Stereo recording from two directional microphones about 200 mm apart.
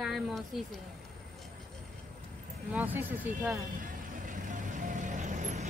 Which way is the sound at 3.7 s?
40° right (ahead or behind).